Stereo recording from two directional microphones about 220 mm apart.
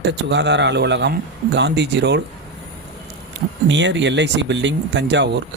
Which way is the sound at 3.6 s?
55° right (ahead or behind).